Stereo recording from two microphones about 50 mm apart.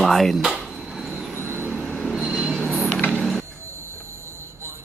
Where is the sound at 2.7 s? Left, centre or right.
Centre.